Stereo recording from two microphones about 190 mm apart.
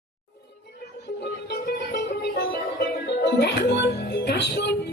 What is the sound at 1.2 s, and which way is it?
Music, 60° left (ahead or behind).